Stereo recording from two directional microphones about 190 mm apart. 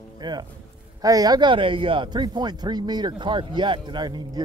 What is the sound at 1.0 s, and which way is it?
Speech, 20° right (ahead or behind).